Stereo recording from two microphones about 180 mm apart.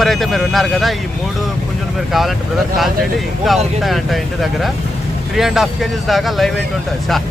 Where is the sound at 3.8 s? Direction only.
Centre (ahead or behind).